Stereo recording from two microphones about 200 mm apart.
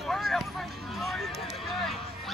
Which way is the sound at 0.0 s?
Centre (ahead or behind).